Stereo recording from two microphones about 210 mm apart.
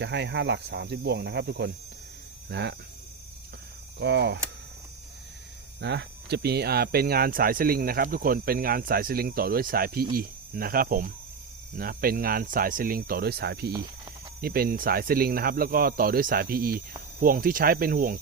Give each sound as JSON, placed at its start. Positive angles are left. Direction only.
{"t": 0.0, "sound": "speech", "side_deg": -55}
{"t": 4.0, "sound": "speech", "side_deg": -55}
{"t": 5.8, "sound": "speech", "side_deg": -55}